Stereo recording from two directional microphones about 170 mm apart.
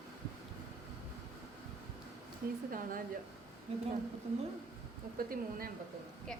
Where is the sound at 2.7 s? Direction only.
55° right (ahead or behind).